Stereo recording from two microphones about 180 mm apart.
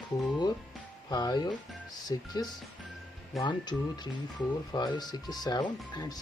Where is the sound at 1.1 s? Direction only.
20° left (ahead or behind).